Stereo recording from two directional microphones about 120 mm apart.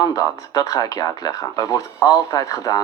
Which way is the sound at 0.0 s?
30° left (ahead or behind).